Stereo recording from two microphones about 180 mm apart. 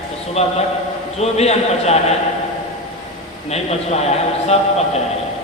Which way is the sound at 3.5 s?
35° left (ahead or behind).